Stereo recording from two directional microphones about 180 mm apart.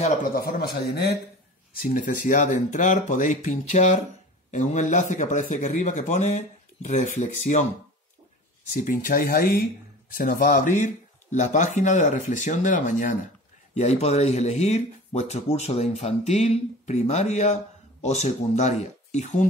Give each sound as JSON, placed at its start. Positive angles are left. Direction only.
{"t": 0.0, "sound": "a man's voice", "side_deg": 45}
{"t": 0.7, "sound": "speech", "side_deg": 65}
{"t": 1.8, "sound": "a man's voice", "side_deg": 50}
{"t": 8.8, "sound": "a man's voice", "side_deg": 50}